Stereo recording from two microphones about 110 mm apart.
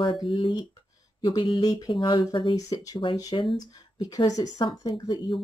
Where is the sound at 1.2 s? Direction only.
40° left (ahead or behind).